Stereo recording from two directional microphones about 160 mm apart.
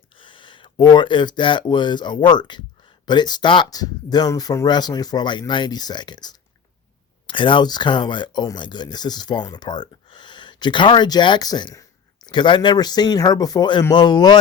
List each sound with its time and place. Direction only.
0.2 s speech: 30° left (ahead or behind)